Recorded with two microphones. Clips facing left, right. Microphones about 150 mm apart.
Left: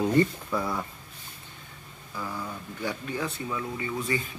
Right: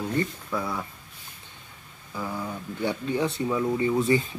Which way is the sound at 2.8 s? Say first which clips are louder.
Right 6 dB; 25° right (ahead or behind).